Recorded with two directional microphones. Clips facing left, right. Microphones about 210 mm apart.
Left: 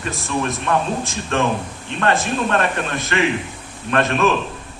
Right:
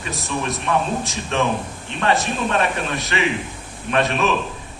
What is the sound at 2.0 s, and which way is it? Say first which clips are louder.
A man's voice: left 1 dB; 50° left (ahead or behind).